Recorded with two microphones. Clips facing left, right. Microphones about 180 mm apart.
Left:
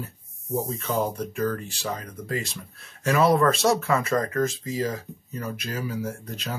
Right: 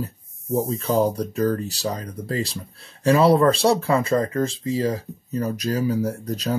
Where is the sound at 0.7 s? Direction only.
35° right (ahead or behind).